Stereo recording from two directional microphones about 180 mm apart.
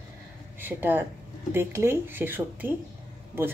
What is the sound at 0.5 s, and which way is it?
Speech, 10° right (ahead or behind).